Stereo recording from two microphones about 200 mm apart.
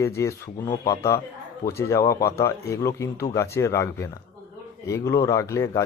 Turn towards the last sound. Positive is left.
turn(degrees=15)  # may be behind; listen again after turning